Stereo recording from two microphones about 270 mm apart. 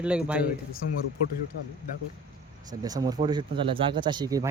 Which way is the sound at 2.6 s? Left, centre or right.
Centre.